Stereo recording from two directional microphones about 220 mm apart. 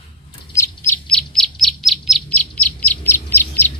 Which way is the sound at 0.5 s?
10° left (ahead or behind).